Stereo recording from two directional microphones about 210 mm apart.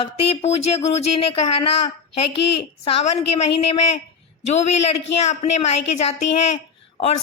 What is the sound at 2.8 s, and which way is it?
A woman's voice, 30° left (ahead or behind).